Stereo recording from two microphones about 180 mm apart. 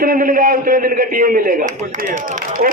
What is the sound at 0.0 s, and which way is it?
A man's voice, 50° right (ahead or behind).